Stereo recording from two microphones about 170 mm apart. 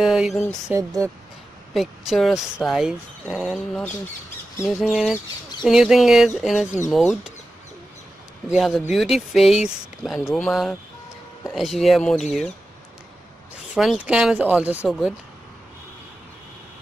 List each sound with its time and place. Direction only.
0.0 s speech: 5° right (ahead or behind)
0.7 s speech: 15° right (ahead or behind)
1.7 s speech: centre (ahead or behind)
4.8 s speech: 5° right (ahead or behind)
8.5 s speech: centre (ahead or behind)
13.7 s speech: 5° right (ahead or behind)